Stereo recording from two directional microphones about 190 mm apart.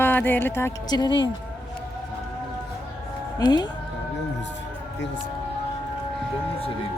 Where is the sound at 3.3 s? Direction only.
20° left (ahead or behind).